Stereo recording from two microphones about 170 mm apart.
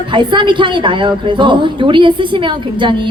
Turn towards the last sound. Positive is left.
turn(degrees=-30)  # may be behind; listen again after turning